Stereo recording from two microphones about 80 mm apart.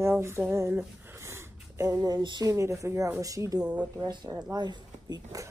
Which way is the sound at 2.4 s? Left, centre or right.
Right.